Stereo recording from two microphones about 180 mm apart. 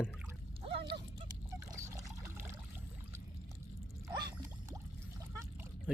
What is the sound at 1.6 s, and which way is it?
Water, 15° right (ahead or behind).